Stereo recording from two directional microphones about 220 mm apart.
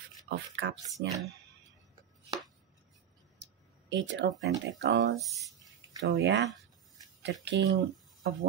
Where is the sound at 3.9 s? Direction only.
55° right (ahead or behind).